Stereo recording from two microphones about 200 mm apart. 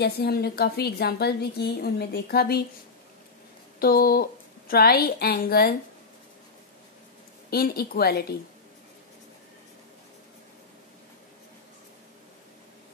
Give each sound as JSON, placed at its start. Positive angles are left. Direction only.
{"t": 0.0, "sound": "a woman's voice", "side_deg": 50}
{"t": 3.8, "sound": "a woman's voice", "side_deg": 50}
{"t": 7.5, "sound": "a woman's voice", "side_deg": 50}